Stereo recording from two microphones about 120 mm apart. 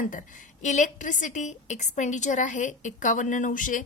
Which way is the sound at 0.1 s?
90° left.